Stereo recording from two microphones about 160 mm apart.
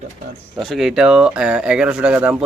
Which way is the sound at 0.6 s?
Centre (ahead or behind).